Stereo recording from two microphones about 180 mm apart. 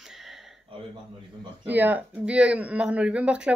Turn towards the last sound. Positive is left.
turn(degrees=-5)  # may be behind; listen again after turning